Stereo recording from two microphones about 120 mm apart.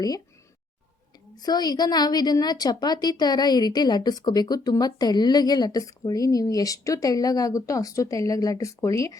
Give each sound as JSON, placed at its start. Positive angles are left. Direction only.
{"t": 1.4, "sound": "a woman's voice", "side_deg": 35}